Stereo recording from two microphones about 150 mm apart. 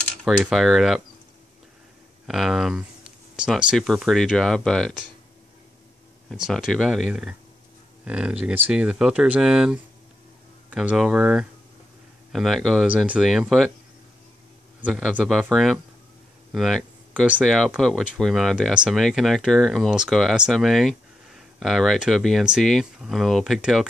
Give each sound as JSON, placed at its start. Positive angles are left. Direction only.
{"t": 0.2, "sound": "speech", "side_deg": 0}
{"t": 2.2, "sound": "speech", "side_deg": 0}
{"t": 6.3, "sound": "speech", "side_deg": -5}
{"t": 14.8, "sound": "speech", "side_deg": -5}